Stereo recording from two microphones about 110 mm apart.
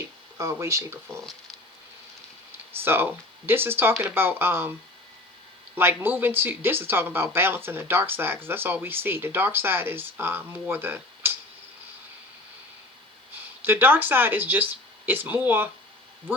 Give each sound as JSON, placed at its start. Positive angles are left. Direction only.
{"t": 0.3, "sound": "speech", "side_deg": -25}
{"t": 2.8, "sound": "speech", "side_deg": -20}
{"t": 5.7, "sound": "speech", "side_deg": -20}
{"t": 13.7, "sound": "speech", "side_deg": -20}